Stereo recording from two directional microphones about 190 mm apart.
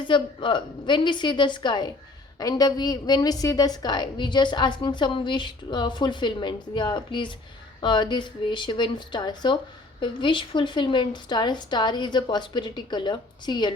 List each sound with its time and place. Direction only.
0.1 s a woman's voice: 25° left (ahead or behind)